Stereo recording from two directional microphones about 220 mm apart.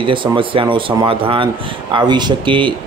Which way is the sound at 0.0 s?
20° right (ahead or behind).